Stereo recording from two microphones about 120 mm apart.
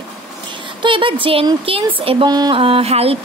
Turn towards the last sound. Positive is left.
turn(degrees=-55)  # may be behind; listen again after turning